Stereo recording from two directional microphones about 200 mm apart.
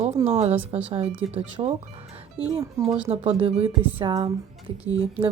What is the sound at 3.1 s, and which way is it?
Speech, 30° right (ahead or behind).